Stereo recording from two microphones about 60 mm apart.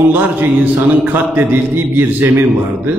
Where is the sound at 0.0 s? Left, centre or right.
Right.